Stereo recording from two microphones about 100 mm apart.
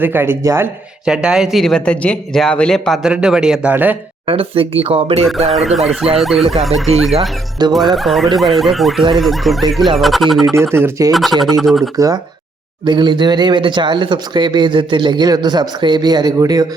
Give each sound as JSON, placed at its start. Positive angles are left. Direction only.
{"t": 0.0, "sound": "speech", "side_deg": -20}
{"t": 1.0, "sound": "speech", "side_deg": -5}
{"t": 3.0, "sound": "a man's voice", "side_deg": -10}
{"t": 4.3, "sound": "speech", "side_deg": -65}
{"t": 5.5, "sound": "speech", "side_deg": 0}
{"t": 7.6, "sound": "speech", "side_deg": -45}
{"t": 7.9, "sound": "speech", "side_deg": 0}
{"t": 10.5, "sound": "speech", "side_deg": -25}
{"t": 11.1, "sound": "speech", "side_deg": 0}
{"t": 11.9, "sound": "speech", "side_deg": -35}
{"t": 12.8, "sound": "speech", "side_deg": -50}